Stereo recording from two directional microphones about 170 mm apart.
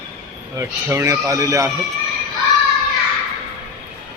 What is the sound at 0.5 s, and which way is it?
Speech, 15° right (ahead or behind).